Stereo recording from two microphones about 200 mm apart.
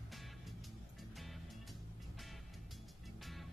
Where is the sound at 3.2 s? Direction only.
Centre (ahead or behind).